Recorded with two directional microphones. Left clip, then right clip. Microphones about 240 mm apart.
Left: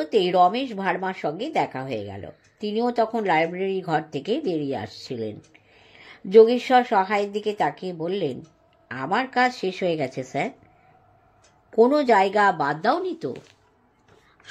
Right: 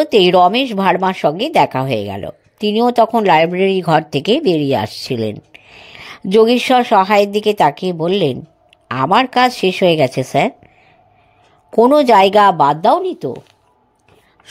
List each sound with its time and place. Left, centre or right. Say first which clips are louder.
0.0 s a woman's voice: right 9 dB; right
11.7 s a woman's voice: right 8 dB; right